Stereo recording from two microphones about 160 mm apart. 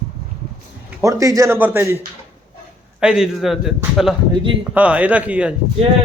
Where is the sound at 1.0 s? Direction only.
20° right (ahead or behind).